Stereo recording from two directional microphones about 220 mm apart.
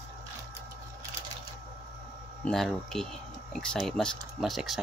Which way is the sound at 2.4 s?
Centre (ahead or behind).